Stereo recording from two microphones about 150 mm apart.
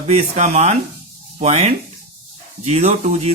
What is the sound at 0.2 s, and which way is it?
A man's voice, 50° right (ahead or behind).